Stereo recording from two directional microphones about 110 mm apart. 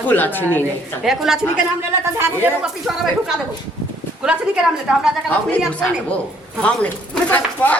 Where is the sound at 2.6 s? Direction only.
5° right (ahead or behind).